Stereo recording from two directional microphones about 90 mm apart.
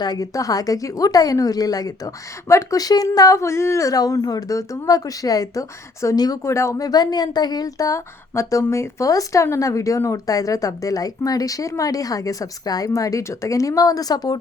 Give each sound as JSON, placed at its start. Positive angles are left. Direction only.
{"t": 0.0, "sound": "a woman's voice", "side_deg": 45}
{"t": 6.4, "sound": "speech", "side_deg": 30}